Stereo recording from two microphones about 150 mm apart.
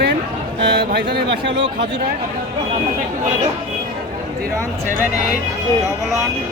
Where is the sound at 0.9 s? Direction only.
90° right.